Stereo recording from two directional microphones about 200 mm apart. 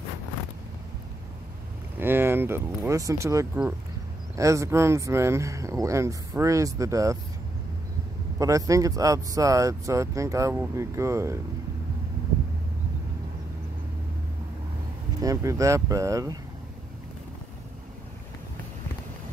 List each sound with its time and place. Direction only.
2.0 s speech: 10° right (ahead or behind)
8.4 s speech: 15° right (ahead or behind)
15.2 s speech: 15° right (ahead or behind)